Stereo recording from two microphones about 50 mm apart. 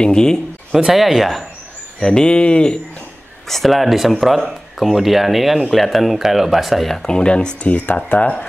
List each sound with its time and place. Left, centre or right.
0.0 s speech: centre
0.9 s speech: centre
2.0 s speech: centre
3.4 s speech: centre
7.1 s speech: centre